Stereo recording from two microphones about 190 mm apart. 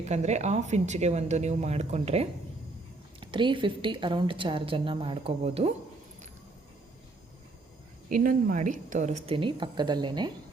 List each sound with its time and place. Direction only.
0.0 s a woman's voice: 35° right (ahead or behind)
8.2 s a woman's voice: 50° right (ahead or behind); by 10.3 s 20° right (ahead or behind)